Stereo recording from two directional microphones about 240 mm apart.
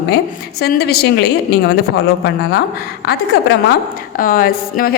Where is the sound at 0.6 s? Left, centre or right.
Left.